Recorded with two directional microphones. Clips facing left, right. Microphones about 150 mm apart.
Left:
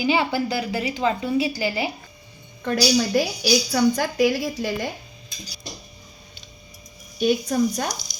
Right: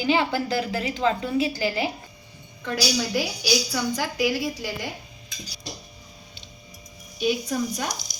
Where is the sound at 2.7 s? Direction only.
45° left (ahead or behind).